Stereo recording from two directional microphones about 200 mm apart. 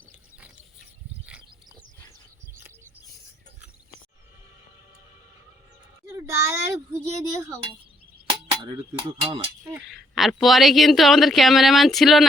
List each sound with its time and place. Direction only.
6.1 s a sound: 15° right (ahead or behind)
9.0 s speech: 25° right (ahead or behind)
9.6 s a woman's voice: centre (ahead or behind)